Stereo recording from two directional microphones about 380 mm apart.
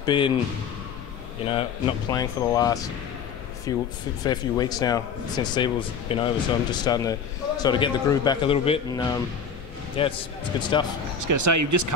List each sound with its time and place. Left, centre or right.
0.0 s speech: centre
1.5 s speech: centre
11.1 s speech: right